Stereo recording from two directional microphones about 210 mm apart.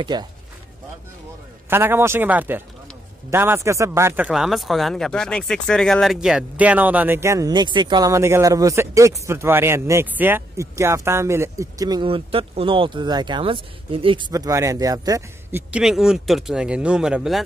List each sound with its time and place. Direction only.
0.0 s speech: 20° right (ahead or behind)
1.7 s a man's voice: 10° right (ahead or behind)